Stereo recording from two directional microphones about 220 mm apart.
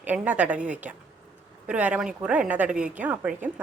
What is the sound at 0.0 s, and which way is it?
A woman's voice, 5° right (ahead or behind).